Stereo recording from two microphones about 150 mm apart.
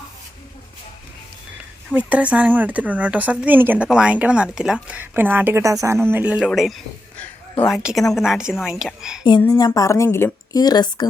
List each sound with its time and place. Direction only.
1.9 s a woman's voice: 10° right (ahead or behind)
9.4 s a woman's voice: 25° left (ahead or behind)